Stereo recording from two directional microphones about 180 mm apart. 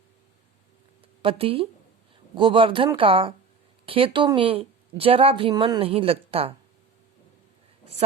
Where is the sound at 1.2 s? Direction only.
30° right (ahead or behind).